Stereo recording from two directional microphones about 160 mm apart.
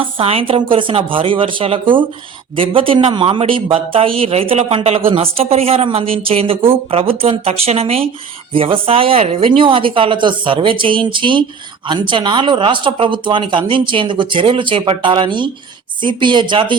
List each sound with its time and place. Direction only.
0.0 s a man's voice: 40° right (ahead or behind)